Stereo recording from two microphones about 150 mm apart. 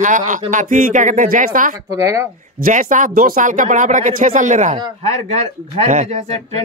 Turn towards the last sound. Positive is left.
turn(degrees=-45)  # may be behind; listen again after turning